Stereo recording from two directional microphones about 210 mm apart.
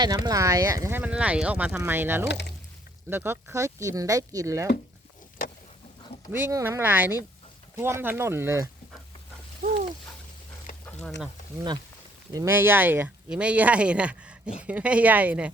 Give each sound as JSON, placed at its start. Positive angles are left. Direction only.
{"t": 0.0, "sound": "speech", "side_deg": -20}
{"t": 6.3, "sound": "speech", "side_deg": -10}
{"t": 9.6, "sound": "a sound", "side_deg": -40}
{"t": 12.3, "sound": "speech", "side_deg": -15}